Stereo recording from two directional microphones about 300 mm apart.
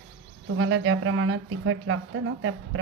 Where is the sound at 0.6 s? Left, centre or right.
Right.